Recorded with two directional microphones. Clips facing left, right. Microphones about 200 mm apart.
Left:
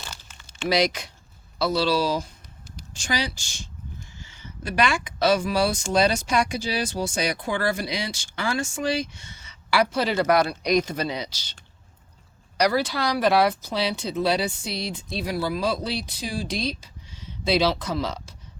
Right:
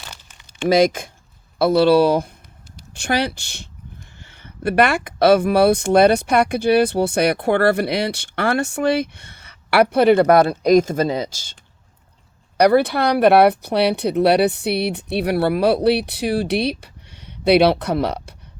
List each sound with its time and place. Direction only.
0.7 s speech: 50° right (ahead or behind)
12.5 s speech: 55° right (ahead or behind)